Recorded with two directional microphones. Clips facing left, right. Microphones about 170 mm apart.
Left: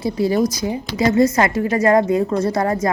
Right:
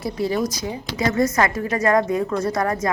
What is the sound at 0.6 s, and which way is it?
Speech, 30° left (ahead or behind).